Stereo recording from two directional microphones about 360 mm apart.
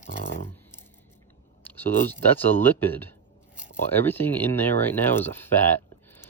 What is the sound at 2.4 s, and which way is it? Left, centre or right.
Speech, centre.